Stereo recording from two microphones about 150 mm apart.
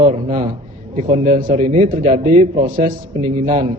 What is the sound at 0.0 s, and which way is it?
A man's voice, 65° right (ahead or behind).